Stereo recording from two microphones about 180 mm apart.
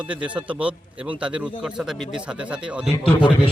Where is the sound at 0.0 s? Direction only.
5° right (ahead or behind).